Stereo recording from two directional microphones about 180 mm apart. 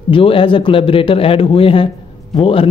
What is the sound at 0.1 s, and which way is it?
A man's voice, 30° left (ahead or behind).